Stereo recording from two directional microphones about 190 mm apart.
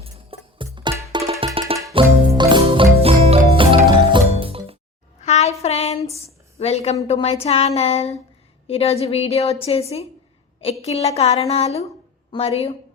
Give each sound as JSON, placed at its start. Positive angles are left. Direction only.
{"t": 0.0, "sound": "music", "side_deg": -25}
{"t": 5.2, "sound": "child singing", "side_deg": 35}
{"t": 6.1, "sound": "a sound", "side_deg": 30}
{"t": 7.1, "sound": "a woman's voice", "side_deg": 35}